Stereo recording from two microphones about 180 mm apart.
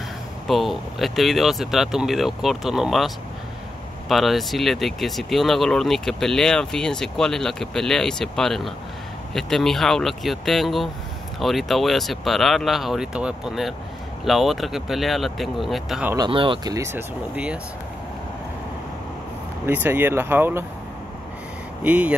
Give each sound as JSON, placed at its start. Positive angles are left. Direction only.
{"t": 0.5, "sound": "speech", "side_deg": 0}
{"t": 4.1, "sound": "speech", "side_deg": 0}
{"t": 16.3, "sound": "speech", "side_deg": -30}
{"t": 16.7, "sound": "speech", "side_deg": -15}
{"t": 19.6, "sound": "speech", "side_deg": -10}
{"t": 21.8, "sound": "speech", "side_deg": -5}